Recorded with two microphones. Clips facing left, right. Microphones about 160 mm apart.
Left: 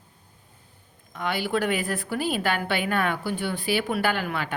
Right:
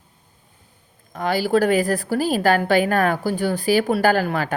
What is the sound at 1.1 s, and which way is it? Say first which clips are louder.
A woman's voice: right 7 dB; 35° right (ahead or behind).